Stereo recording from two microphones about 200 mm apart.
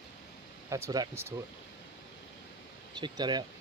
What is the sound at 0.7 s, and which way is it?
Speech, 15° right (ahead or behind).